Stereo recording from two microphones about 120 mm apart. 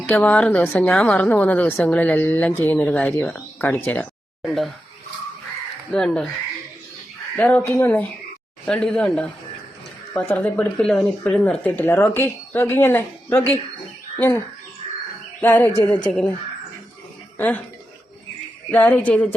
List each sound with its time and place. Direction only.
0.0 s a woman's voice: 10° left (ahead or behind)
4.4 s speech: centre (ahead or behind)
5.9 s speech: 5° left (ahead or behind)
7.3 s a woman's voice: 15° left (ahead or behind)
8.6 s a woman's voice: 10° left (ahead or behind)
17.3 s speech: 15° left (ahead or behind)
18.7 s a woman's voice: 10° left (ahead or behind)